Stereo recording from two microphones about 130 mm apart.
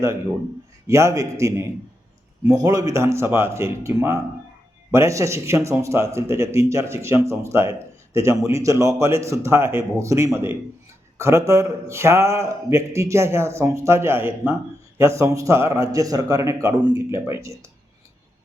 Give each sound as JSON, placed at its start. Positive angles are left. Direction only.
{"t": 0.9, "sound": "speech", "side_deg": -20}